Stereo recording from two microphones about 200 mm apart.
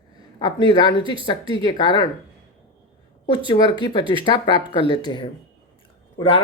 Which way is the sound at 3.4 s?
20° left (ahead or behind).